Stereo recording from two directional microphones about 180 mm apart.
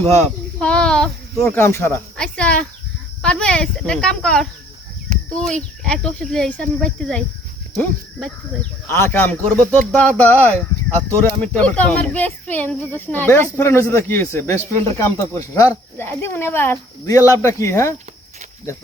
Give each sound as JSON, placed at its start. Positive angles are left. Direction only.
{"t": 0.0, "sound": "a sound", "side_deg": 10}
{"t": 1.4, "sound": "speech", "side_deg": 15}
{"t": 8.9, "sound": "speech", "side_deg": 15}